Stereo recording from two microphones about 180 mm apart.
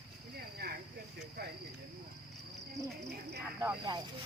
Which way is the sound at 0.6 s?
60° right (ahead or behind).